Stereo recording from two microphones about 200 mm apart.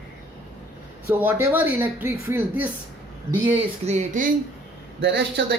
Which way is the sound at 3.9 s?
40° right (ahead or behind).